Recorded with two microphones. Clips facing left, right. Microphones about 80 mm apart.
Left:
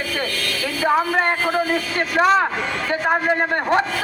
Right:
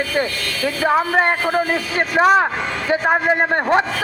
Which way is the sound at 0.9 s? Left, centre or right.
Right.